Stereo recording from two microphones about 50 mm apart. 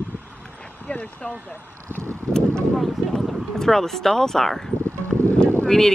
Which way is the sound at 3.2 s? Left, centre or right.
Centre.